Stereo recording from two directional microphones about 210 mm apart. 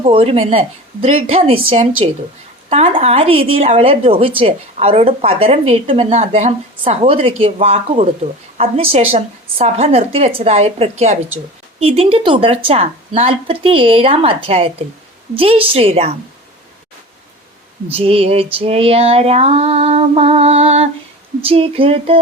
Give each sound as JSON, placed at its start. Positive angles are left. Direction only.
{"t": 0.0, "sound": "a woman's voice", "side_deg": -25}
{"t": 17.9, "sound": "a woman's voice", "side_deg": -25}